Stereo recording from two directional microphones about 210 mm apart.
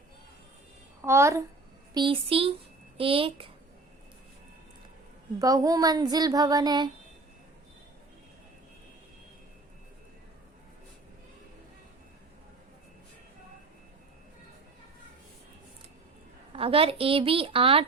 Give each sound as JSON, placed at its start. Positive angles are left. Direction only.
{"t": 1.0, "sound": "child singing", "side_deg": -15}
{"t": 1.9, "sound": "a woman's voice", "side_deg": -20}
{"t": 5.4, "sound": "child singing", "side_deg": -15}
{"t": 16.5, "sound": "a woman's voice", "side_deg": -25}